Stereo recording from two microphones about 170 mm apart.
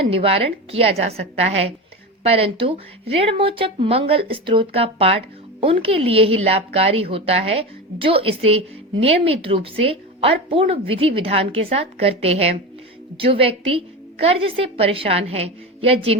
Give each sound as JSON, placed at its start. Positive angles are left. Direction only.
{"t": 0.1, "sound": "a woman's voice", "side_deg": -35}